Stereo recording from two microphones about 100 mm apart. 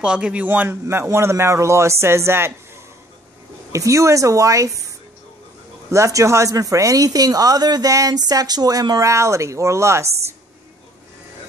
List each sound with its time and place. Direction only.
0.0 s a man's voice: 10° right (ahead or behind)
3.7 s speech: 30° right (ahead or behind)